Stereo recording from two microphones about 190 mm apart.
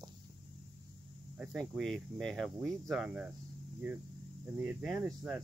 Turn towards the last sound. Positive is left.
turn(degrees=-10)  # may be behind; listen again after turning